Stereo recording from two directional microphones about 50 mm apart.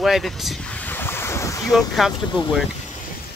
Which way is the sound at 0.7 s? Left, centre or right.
Left.